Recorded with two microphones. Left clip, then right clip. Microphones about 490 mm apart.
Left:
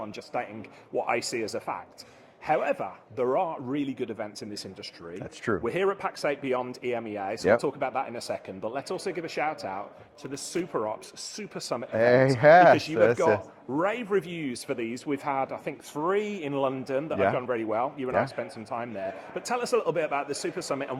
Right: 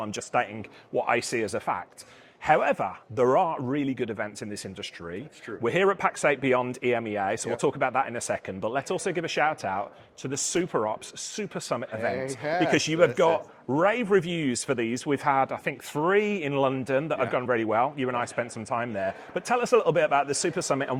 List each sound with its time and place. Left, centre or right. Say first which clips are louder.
0.0 s speech: right 6 dB; right
12.1 s speech: left 12 dB; left
12.7 s speech: even; right